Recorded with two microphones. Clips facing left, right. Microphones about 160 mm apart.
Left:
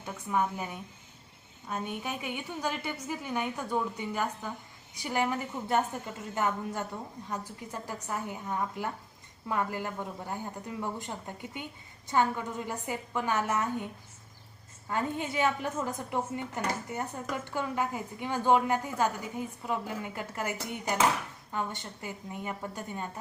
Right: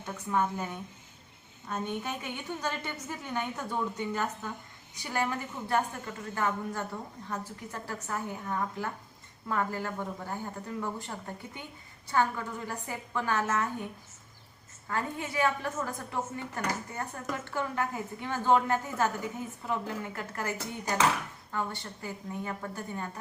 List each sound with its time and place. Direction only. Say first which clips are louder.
0.0 s a woman's voice: even; 10° left (ahead or behind)
14.8 s a woman's voice: left 2 dB; 20° left (ahead or behind)